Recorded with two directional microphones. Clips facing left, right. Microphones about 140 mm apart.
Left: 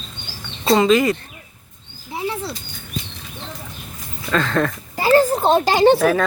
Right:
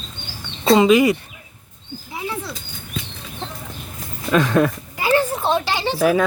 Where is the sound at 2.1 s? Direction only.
25° left (ahead or behind).